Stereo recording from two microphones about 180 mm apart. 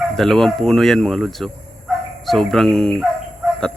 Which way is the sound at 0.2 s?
Centre (ahead or behind).